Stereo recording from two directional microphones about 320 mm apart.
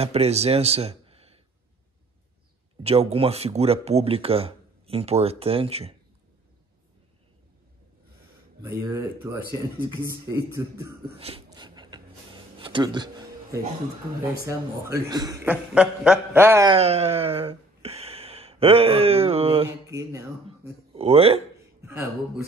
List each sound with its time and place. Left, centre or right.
0.0 s speech: centre
2.8 s a man's voice: centre
8.6 s a man's voice: centre
9.8 s a sound: centre
14.4 s a man's voice: centre